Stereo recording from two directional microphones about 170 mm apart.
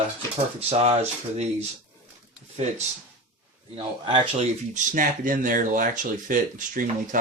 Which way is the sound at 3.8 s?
30° right (ahead or behind).